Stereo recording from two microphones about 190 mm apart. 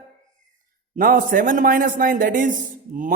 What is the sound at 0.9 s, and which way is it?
A man's voice, 45° right (ahead or behind).